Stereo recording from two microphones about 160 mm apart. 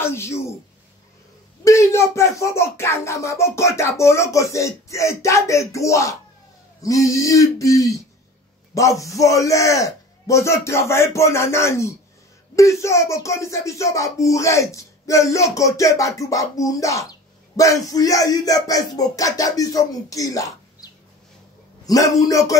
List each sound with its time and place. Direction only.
0.0 s a woman's voice: 15° left (ahead or behind)
1.6 s speech: 20° left (ahead or behind)